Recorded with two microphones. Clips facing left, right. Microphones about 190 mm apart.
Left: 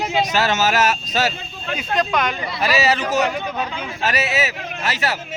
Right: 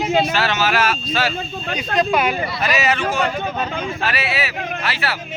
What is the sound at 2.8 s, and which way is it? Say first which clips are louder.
Speech: left 1 dB; 40° left (ahead or behind).